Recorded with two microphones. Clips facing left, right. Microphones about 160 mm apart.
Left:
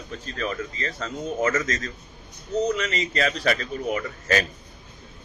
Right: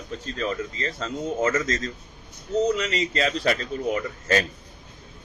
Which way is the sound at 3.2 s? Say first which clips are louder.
Left 1 dB; 30° right (ahead or behind).